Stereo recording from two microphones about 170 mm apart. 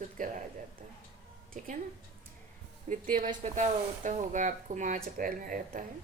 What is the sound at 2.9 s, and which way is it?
A woman's voice, 55° right (ahead or behind).